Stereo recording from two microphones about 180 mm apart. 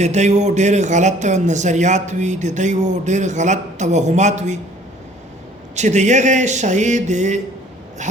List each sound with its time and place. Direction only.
0.0 s a man's voice: 40° right (ahead or behind)
5.7 s a man's voice: 40° right (ahead or behind)